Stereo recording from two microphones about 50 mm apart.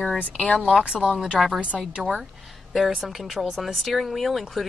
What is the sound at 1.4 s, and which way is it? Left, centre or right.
Speech, centre.